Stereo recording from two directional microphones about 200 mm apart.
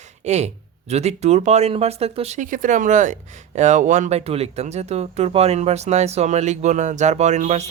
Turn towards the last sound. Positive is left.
turn(degrees=-35)  # may be behind; listen again after turning